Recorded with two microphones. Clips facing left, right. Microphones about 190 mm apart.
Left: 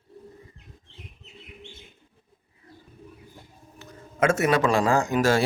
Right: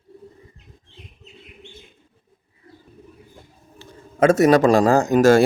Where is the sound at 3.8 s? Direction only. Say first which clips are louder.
Right 6 dB; 30° right (ahead or behind).